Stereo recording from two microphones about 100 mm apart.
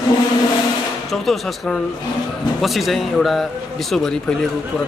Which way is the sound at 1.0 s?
5° left (ahead or behind).